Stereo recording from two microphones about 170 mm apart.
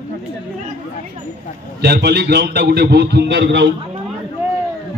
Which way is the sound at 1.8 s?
75° right (ahead or behind).